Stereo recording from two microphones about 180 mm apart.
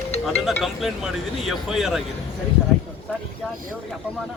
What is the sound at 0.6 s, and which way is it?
Speech, centre (ahead or behind).